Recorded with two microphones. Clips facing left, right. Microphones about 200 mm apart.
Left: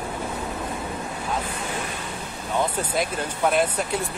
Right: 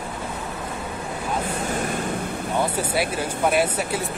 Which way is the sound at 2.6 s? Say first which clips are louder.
Right 2 dB; 10° right (ahead or behind).